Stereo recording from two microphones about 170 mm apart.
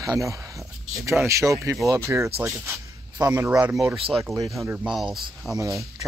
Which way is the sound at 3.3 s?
10° right (ahead or behind).